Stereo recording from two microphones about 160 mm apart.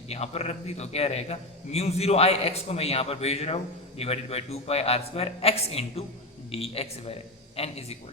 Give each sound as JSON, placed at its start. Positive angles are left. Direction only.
{"t": 0.1, "sound": "a man's voice", "side_deg": 40}